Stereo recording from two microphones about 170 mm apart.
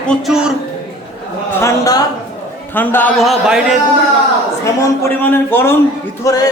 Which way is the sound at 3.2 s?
Centre (ahead or behind).